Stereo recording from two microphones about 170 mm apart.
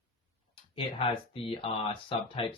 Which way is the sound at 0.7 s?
30° left (ahead or behind).